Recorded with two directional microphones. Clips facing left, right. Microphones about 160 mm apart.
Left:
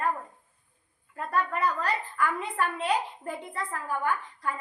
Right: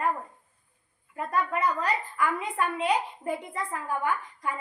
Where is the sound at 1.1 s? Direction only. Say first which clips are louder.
Right 1 dB; 10° right (ahead or behind).